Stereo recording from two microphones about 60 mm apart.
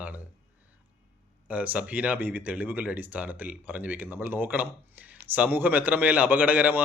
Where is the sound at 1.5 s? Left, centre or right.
Right.